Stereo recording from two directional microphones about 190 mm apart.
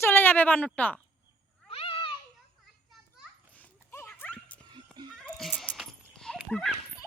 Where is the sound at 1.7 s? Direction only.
30° left (ahead or behind).